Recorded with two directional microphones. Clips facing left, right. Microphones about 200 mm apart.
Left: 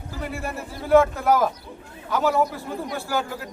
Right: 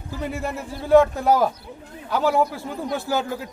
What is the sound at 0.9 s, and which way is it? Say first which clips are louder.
Speech: right 2 dB; 15° right (ahead or behind).